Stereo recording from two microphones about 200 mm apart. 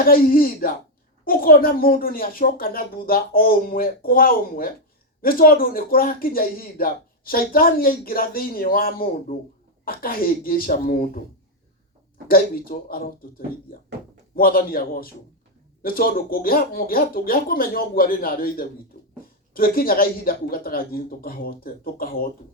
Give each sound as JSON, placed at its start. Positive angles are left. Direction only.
{"t": 0.0, "sound": "speech", "side_deg": 45}
{"t": 12.3, "sound": "speech", "side_deg": 45}
{"t": 14.3, "sound": "speech", "side_deg": 45}